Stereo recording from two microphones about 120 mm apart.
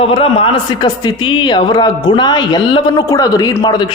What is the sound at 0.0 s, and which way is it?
Speech, 50° left (ahead or behind).